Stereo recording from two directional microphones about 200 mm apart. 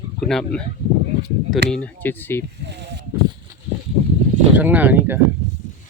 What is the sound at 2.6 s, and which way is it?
Speech, 60° right (ahead or behind).